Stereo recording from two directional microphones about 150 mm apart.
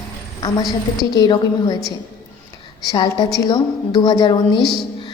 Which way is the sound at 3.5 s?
30° left (ahead or behind).